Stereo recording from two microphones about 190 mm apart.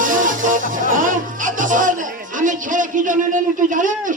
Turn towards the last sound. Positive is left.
turn(degrees=-45)  # may be behind; listen again after turning